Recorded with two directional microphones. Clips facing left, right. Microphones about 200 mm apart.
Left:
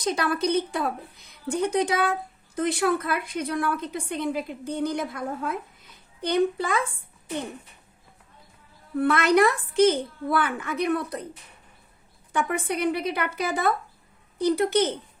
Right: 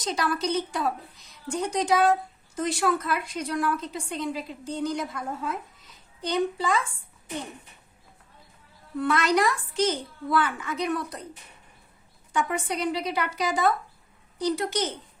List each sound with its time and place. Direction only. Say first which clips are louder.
0.0 s a woman's voice: left 3 dB; 55° left (ahead or behind)
9.0 s a woman's voice: left 4 dB; 60° left (ahead or behind)
12.3 s a woman's voice: left 1 dB; 55° left (ahead or behind)